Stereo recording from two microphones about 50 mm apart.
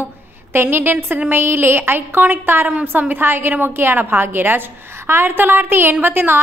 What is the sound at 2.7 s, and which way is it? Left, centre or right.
A woman's voice, right.